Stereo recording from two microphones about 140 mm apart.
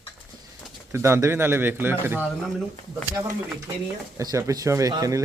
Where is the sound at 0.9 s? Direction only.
20° right (ahead or behind).